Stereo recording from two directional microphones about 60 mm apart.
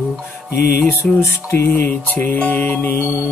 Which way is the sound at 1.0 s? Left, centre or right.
Left.